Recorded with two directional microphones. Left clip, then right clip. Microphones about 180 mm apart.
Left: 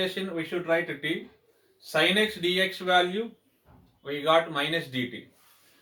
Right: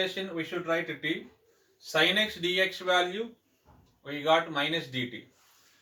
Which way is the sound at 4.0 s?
20° left (ahead or behind).